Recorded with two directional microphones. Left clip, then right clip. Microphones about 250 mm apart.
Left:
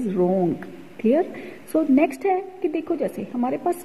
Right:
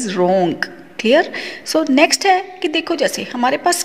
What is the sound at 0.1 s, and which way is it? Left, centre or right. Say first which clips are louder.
Speech: right 7 dB; centre.